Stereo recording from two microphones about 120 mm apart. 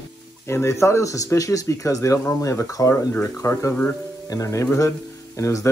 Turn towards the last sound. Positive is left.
turn(degrees=25)  # may be behind; listen again after turning